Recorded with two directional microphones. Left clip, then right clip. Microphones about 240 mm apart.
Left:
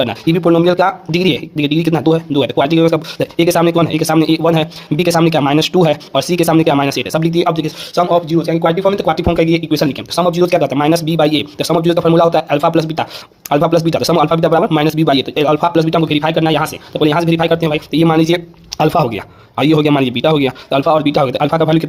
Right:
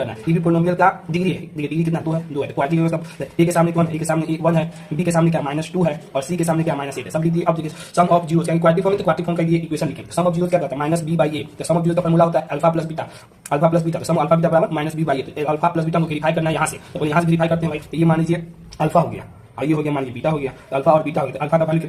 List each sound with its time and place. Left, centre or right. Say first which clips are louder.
0.0 s a man's voice: left 8 dB; left
8.1 s a man's voice: left 4 dB; left